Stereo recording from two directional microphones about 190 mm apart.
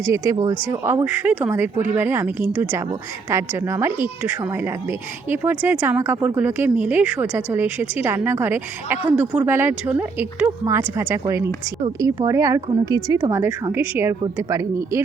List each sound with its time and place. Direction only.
0.0 s a woman's voice: 15° right (ahead or behind)